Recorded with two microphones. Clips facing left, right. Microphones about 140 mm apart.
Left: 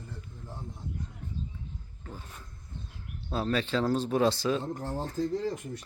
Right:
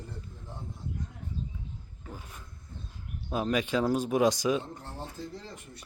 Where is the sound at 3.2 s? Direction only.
15° right (ahead or behind).